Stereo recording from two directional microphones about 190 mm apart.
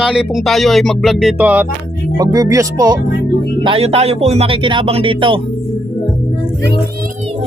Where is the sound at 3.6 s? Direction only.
30° right (ahead or behind).